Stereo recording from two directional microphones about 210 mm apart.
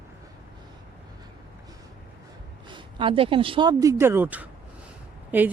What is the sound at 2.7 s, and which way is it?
Speech, 20° right (ahead or behind).